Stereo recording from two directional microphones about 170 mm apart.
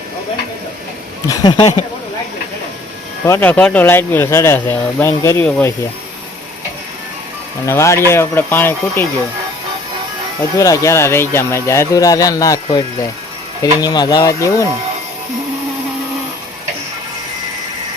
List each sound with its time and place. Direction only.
1.3 s speech: 25° left (ahead or behind)
3.2 s speech: 10° left (ahead or behind)
7.6 s speech: 15° left (ahead or behind)
10.6 s speech: 20° left (ahead or behind)
13.6 s speech: 25° left (ahead or behind)